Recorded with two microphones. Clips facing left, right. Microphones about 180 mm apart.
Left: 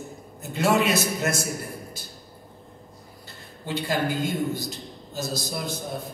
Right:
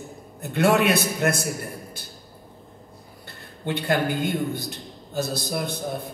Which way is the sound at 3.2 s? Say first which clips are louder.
Right 5 dB; 60° right (ahead or behind).